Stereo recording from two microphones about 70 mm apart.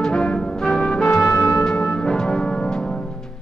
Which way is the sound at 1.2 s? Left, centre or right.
Left.